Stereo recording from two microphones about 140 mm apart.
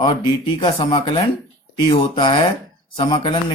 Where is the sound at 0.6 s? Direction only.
35° left (ahead or behind).